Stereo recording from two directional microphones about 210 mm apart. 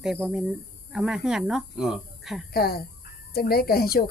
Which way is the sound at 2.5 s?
45° left (ahead or behind).